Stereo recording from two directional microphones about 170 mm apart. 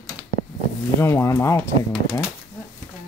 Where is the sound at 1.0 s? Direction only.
15° left (ahead or behind).